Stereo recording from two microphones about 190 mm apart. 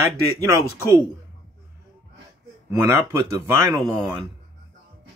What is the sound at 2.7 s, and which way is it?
Speech, 15° right (ahead or behind).